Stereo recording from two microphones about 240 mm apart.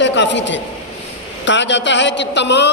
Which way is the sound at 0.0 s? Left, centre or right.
Left.